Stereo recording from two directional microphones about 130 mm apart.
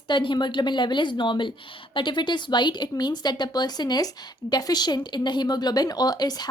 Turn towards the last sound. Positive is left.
turn(degrees=30)  # may be behind; listen again after turning